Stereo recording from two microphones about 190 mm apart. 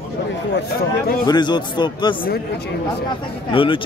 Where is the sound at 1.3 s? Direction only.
25° left (ahead or behind).